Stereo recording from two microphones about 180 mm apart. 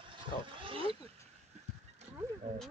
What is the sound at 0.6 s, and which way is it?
Wild animals, 30° right (ahead or behind).